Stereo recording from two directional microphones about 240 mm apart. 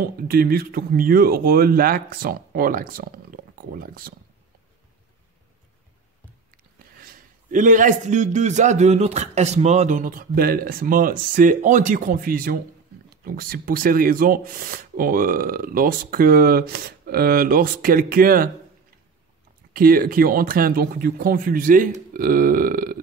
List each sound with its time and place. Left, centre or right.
0.0 s speech: right
7.5 s speech: right
19.7 s speech: right